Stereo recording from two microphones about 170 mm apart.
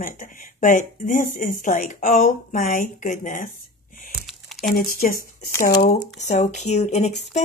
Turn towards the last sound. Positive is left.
turn(degrees=40)  # may be behind; listen again after turning